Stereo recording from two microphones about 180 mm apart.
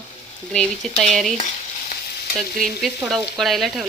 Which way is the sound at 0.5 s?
5° left (ahead or behind).